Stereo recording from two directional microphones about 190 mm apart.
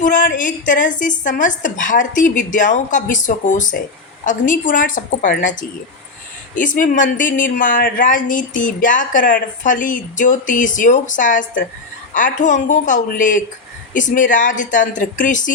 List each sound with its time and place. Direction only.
0.0 s a woman's voice: 45° left (ahead or behind)